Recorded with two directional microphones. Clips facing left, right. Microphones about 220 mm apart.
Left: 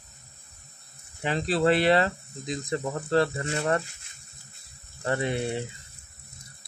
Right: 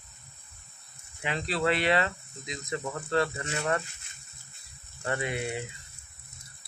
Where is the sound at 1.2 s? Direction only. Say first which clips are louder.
Left 5 dB; 35° left (ahead or behind).